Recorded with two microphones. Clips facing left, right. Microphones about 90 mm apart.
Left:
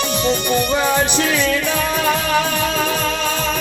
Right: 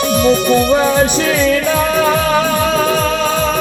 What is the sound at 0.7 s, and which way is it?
Music, 30° right (ahead or behind).